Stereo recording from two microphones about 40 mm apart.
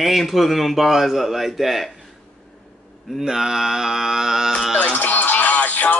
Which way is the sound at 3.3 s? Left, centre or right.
Centre.